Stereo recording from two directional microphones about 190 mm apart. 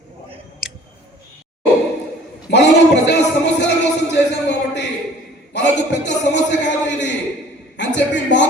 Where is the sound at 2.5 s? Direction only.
65° left (ahead or behind).